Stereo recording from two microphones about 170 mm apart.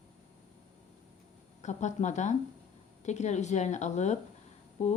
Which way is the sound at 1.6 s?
45° left (ahead or behind).